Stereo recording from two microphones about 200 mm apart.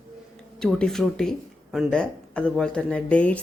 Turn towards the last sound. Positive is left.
turn(degrees=5)  # may be behind; listen again after turning